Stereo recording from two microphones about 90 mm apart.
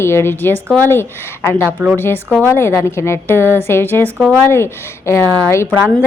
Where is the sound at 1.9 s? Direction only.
25° left (ahead or behind).